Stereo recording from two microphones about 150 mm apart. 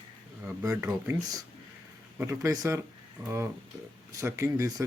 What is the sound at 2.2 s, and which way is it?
Speech, 20° right (ahead or behind).